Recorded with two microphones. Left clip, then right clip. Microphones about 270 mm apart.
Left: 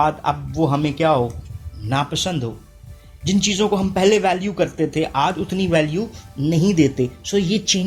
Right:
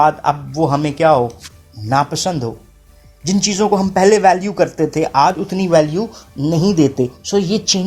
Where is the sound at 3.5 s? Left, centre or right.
Centre.